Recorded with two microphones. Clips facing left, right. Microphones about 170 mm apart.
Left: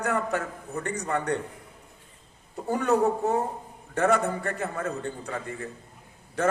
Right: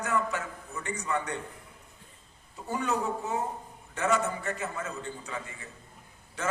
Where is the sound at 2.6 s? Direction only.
60° left (ahead or behind).